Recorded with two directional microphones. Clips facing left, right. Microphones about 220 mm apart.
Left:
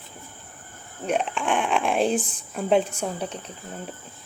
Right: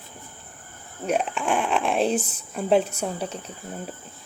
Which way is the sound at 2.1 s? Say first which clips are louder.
Even; 40° right (ahead or behind).